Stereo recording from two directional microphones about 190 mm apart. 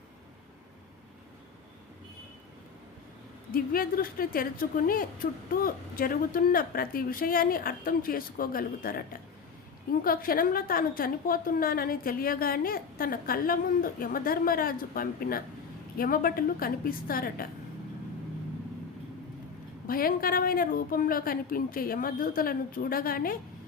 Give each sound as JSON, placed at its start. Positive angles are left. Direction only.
{"t": 3.5, "sound": "a woman's voice", "side_deg": 50}
{"t": 19.9, "sound": "a woman's voice", "side_deg": 50}